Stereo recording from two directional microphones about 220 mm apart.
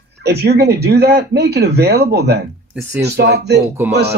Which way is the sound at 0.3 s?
45° right (ahead or behind).